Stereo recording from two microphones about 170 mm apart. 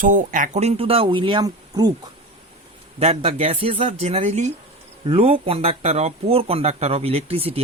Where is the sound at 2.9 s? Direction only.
35° right (ahead or behind).